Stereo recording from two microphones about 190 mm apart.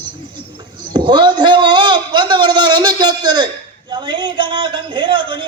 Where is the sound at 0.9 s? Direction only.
25° right (ahead or behind).